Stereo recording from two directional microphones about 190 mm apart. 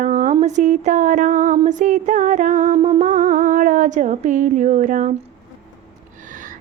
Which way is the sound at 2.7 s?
30° right (ahead or behind).